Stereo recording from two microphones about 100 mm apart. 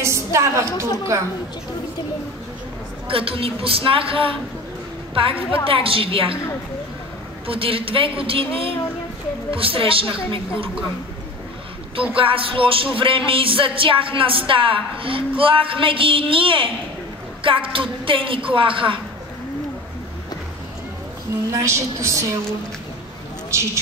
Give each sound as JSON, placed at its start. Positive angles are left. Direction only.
{"t": 0.0, "sound": "a woman's voice", "side_deg": -30}
{"t": 3.1, "sound": "music", "side_deg": -65}
{"t": 7.4, "sound": "music", "side_deg": -65}
{"t": 12.2, "sound": "music", "side_deg": -65}
{"t": 21.5, "sound": "a woman's voice", "side_deg": -30}
{"t": 23.5, "sound": "speech", "side_deg": -30}